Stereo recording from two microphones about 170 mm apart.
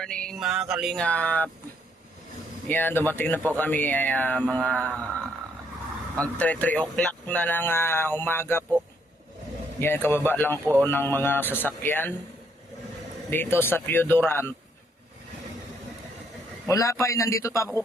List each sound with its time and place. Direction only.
0.0 s a sound: 5° left (ahead or behind)
2.6 s speech: 10° left (ahead or behind)
6.1 s speech: 10° left (ahead or behind)
9.8 s speech: 15° left (ahead or behind)
13.3 s speech: 10° left (ahead or behind)
16.6 s speech: 20° left (ahead or behind)